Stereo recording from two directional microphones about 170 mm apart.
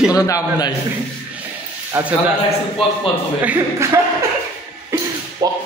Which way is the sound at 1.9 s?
10° right (ahead or behind).